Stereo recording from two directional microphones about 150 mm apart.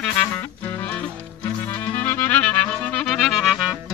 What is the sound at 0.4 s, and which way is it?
Music, 10° left (ahead or behind).